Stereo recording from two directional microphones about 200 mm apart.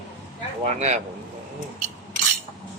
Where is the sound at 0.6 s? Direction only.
35° right (ahead or behind).